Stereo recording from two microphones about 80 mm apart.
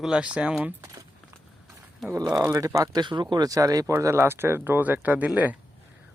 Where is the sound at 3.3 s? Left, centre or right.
Right.